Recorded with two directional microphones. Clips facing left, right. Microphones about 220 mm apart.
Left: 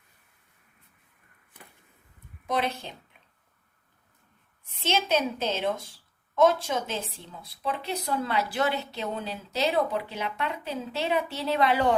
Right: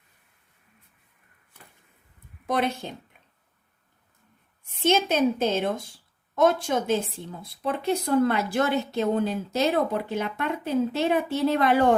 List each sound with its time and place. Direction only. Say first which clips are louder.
2.5 s a woman's voice: right 3 dB; 50° right (ahead or behind)
4.8 s a woman's voice: right 5 dB; 50° right (ahead or behind)